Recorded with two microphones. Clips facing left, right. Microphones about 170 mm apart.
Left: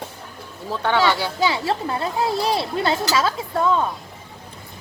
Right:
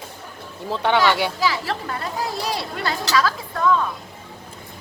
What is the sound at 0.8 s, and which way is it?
Speech, 15° right (ahead or behind).